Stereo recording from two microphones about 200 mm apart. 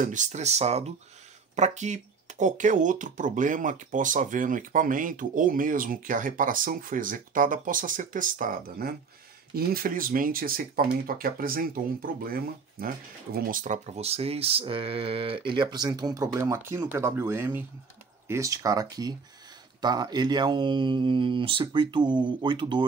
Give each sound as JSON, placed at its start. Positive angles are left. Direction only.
{"t": 0.0, "sound": "speech", "side_deg": -40}